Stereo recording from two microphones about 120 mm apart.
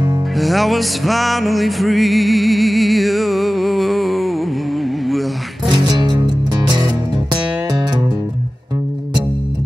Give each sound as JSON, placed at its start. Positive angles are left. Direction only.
{"t": 0.4, "sound": "music", "side_deg": 0}
{"t": 5.7, "sound": "music", "side_deg": -35}